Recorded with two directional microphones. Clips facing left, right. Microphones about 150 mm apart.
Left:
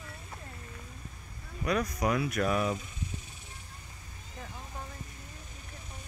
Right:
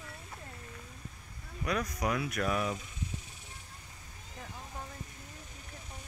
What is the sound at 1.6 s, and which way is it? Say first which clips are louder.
Speech: left 3 dB; 30° left (ahead or behind).